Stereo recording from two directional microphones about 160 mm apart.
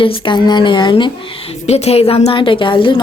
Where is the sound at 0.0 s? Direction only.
30° left (ahead or behind).